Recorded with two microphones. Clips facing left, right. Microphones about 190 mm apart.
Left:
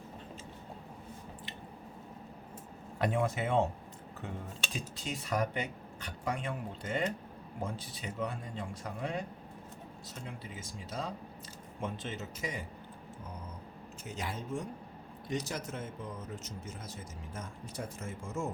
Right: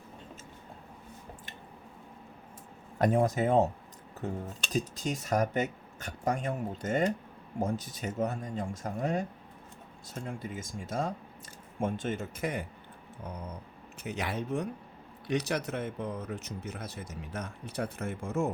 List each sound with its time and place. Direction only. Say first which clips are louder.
3.0 s speech: right 6 dB; 40° right (ahead or behind)
4.7 s speech: right 10 dB; 45° right (ahead or behind)
10.2 s speech: right 7 dB; 50° right (ahead or behind)
14.0 s speech: right 6 dB; 65° right (ahead or behind)